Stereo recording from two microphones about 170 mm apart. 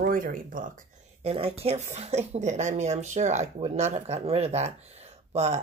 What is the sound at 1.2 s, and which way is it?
Speech, 35° right (ahead or behind).